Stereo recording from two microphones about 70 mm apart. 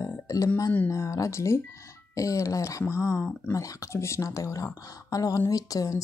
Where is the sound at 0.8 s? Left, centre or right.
Left.